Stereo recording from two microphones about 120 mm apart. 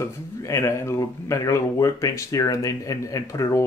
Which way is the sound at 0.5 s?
25° left (ahead or behind).